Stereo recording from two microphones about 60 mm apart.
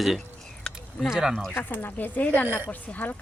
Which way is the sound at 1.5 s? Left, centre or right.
Left.